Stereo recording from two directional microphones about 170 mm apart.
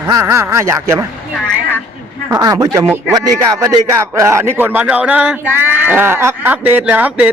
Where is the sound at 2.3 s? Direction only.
20° right (ahead or behind).